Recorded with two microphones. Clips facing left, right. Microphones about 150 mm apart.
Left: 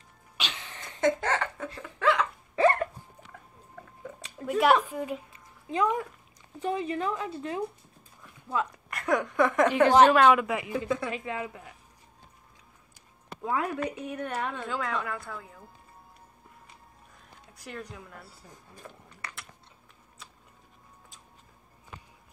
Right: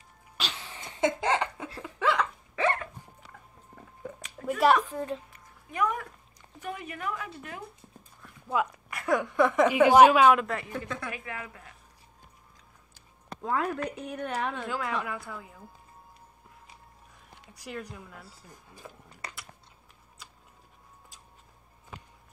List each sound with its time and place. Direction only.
0.7 s chuckle: 15° right (ahead or behind)
1.7 s a sound: 5° right (ahead or behind)
2.5 s hiccup: 40° left (ahead or behind)
4.5 s a woman's voice: centre (ahead or behind)
4.9 s a man's voice: 10° left (ahead or behind)
5.3 s a sound: 20° left (ahead or behind)
6.6 s speech: 25° left (ahead or behind)
8.5 s a woman's voice: 5° right (ahead or behind)
10.4 s a man's voice: 10° left (ahead or behind)
11.1 s speech: 25° left (ahead or behind)
12.9 s a woman's voice: 5° left (ahead or behind)
17.5 s a woman's voice: centre (ahead or behind)